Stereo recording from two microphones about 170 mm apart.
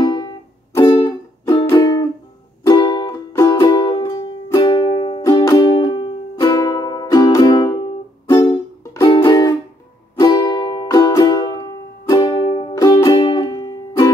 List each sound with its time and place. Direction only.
0.0 s music: 25° left (ahead or behind)
8.9 s music: 25° left (ahead or behind)